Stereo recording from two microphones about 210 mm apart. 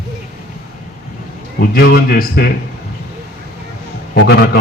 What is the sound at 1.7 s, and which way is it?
Speech, 45° left (ahead or behind).